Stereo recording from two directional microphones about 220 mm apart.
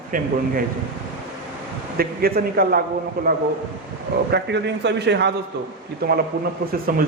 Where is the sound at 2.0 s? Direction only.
45° right (ahead or behind).